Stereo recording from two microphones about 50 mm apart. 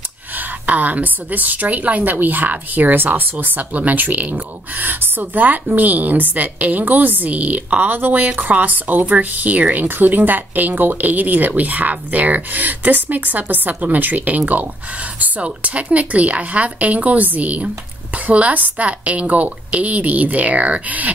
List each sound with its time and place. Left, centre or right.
0.4 s a woman's voice: right